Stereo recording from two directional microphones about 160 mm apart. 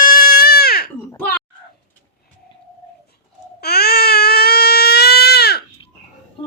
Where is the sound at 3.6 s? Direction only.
80° left.